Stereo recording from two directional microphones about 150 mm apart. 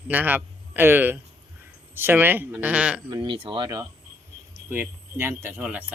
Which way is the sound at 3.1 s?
35° right (ahead or behind).